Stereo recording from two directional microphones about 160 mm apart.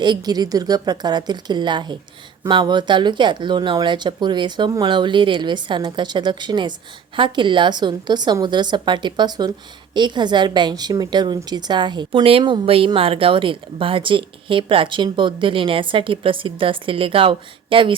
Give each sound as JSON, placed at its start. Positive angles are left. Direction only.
{"t": 0.0, "sound": "a woman's voice", "side_deg": -25}